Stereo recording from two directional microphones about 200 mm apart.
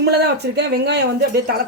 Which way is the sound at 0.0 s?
55° right (ahead or behind).